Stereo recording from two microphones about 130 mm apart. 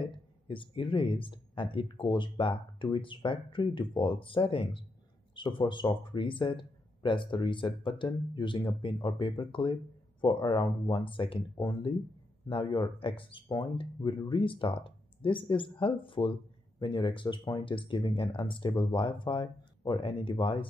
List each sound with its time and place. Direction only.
0.5 s speech: 40° left (ahead or behind)